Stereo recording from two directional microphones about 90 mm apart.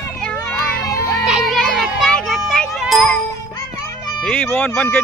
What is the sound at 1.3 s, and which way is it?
Music, 10° right (ahead or behind).